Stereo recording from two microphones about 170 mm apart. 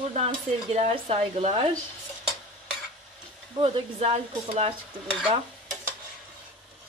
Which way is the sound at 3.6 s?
35° right (ahead or behind).